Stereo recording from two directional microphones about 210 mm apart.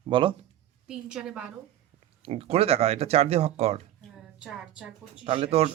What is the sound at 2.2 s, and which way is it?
Speech, 30° right (ahead or behind).